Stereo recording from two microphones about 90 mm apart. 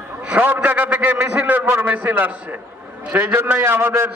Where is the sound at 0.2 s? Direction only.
20° right (ahead or behind).